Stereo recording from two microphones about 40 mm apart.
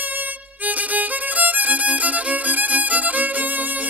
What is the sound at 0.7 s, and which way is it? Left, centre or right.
Violin, right.